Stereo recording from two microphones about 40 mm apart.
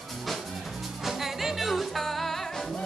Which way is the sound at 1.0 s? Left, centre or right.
Centre.